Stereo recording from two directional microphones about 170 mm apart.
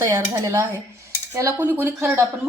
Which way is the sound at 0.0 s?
20° right (ahead or behind).